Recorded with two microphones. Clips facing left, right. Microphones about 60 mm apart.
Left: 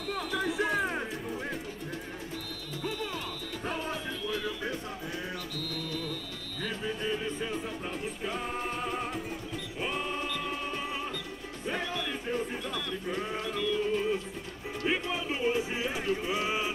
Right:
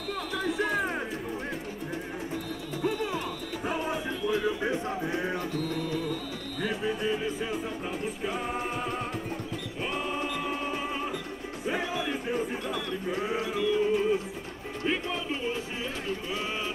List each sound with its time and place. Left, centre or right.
0.1 s music: centre
2.8 s music: centre
6.6 s speech: centre
8.2 s music: centre
11.6 s a sound: centre
14.9 s music: centre